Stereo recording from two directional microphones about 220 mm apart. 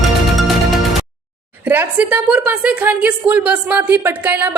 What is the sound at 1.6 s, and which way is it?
A woman's voice, 10° right (ahead or behind).